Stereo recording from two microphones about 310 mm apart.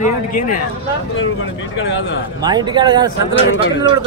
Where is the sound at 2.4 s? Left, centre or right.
Centre.